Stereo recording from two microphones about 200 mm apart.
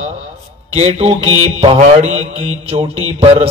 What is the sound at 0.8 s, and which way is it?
Mantra, 30° right (ahead or behind).